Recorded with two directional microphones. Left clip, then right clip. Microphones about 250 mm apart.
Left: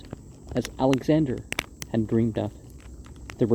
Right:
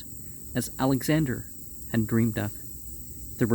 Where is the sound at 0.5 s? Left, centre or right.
Right.